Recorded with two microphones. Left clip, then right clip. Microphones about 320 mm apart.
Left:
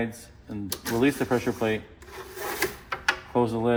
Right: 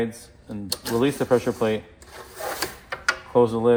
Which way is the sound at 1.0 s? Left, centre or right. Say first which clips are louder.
Right 3 dB; right.